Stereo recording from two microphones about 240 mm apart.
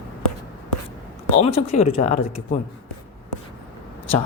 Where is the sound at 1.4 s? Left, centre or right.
Left.